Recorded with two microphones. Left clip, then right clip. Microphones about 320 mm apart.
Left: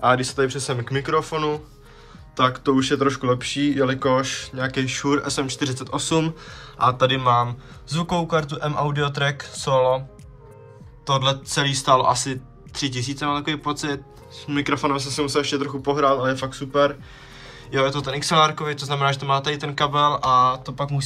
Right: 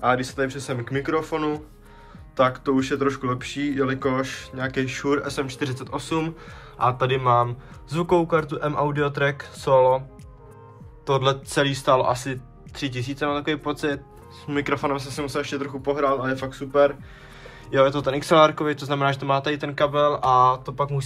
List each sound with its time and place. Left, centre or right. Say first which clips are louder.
0.0 s speech: left 3 dB; centre
11.1 s speech: left 1 dB; centre